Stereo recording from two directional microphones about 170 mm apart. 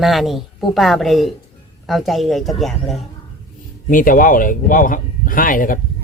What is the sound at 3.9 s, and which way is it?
Speech, 55° left (ahead or behind).